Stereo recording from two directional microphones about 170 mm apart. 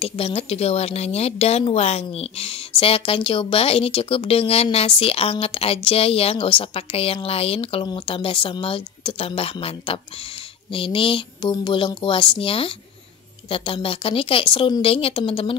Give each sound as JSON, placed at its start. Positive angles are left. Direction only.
{"t": 0.0, "sound": "speech", "side_deg": 35}